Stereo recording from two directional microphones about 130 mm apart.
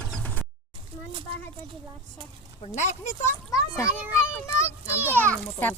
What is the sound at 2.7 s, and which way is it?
Speech, 65° left (ahead or behind).